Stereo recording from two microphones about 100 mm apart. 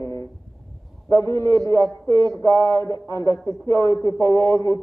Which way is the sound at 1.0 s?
30° left (ahead or behind).